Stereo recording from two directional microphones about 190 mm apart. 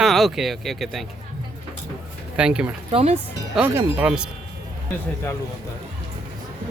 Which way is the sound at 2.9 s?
35° right (ahead or behind).